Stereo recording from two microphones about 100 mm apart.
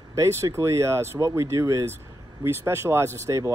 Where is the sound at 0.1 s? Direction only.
30° right (ahead or behind).